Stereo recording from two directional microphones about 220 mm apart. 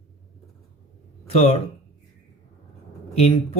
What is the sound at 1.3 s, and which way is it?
Speech, 25° left (ahead or behind).